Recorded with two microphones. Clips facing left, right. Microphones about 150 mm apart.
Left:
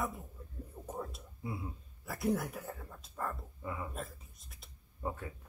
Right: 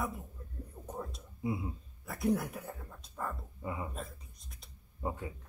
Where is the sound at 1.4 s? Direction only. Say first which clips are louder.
Right 6 dB; 20° right (ahead or behind).